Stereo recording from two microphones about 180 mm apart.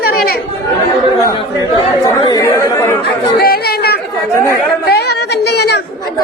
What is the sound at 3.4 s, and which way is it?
Chatter, 60° left (ahead or behind).